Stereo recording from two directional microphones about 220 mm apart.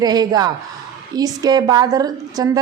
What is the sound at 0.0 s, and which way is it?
A woman's voice, 20° right (ahead or behind).